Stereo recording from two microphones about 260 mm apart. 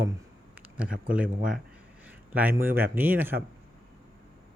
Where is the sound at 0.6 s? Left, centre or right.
Centre.